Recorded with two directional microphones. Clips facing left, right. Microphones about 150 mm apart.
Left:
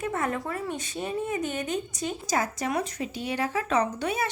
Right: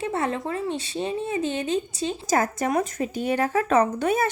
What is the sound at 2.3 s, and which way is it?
Speech, 50° right (ahead or behind).